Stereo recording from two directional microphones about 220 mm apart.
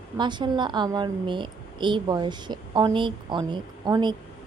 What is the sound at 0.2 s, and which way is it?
A woman's voice, 20° right (ahead or behind).